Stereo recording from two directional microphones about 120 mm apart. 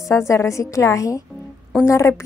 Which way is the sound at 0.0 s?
25° left (ahead or behind).